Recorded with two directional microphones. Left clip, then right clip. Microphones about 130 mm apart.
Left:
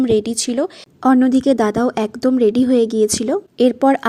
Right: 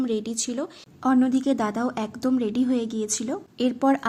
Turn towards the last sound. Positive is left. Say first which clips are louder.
# left 9 dB
turn(degrees=45)  # may be behind; listen again after turning